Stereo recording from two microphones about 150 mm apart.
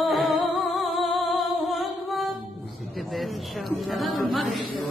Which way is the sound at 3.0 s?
Centre (ahead or behind).